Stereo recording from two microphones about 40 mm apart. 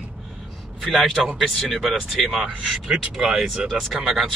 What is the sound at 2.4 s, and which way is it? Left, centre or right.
Speech, centre.